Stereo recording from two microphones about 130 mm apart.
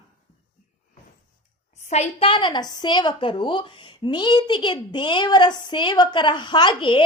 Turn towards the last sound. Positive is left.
turn(degrees=40)  # may be behind; listen again after turning